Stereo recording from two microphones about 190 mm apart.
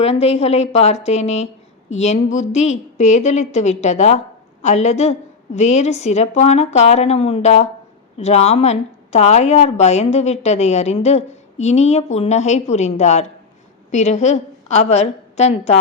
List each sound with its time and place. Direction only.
0.0 s a woman's voice: 30° left (ahead or behind)